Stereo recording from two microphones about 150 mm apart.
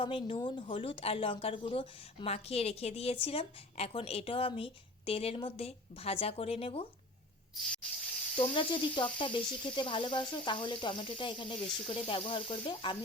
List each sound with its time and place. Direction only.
0.0 s speech: 35° left (ahead or behind)
8.4 s speech: 35° left (ahead or behind)